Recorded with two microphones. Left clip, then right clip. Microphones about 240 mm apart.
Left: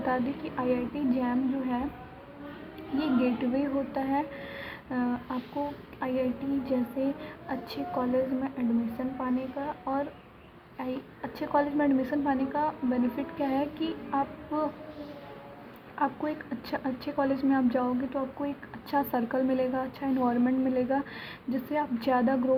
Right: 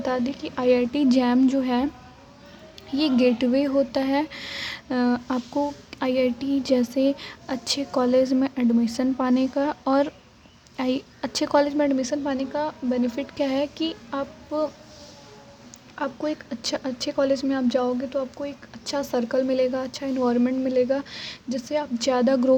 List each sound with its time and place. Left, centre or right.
0.0 s a woman's voice: right
3.0 s a woman's voice: right
16.0 s a woman's voice: right